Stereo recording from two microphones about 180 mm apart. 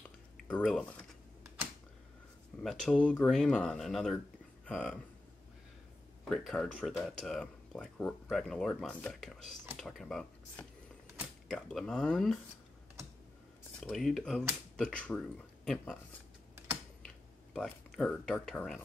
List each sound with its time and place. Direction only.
0.4 s speech: 5° left (ahead or behind)
2.6 s speech: centre (ahead or behind)
6.2 s speech: centre (ahead or behind)
13.7 s speech: centre (ahead or behind)
17.6 s speech: 5° left (ahead or behind)